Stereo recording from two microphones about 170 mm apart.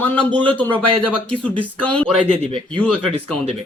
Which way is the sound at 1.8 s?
5° left (ahead or behind).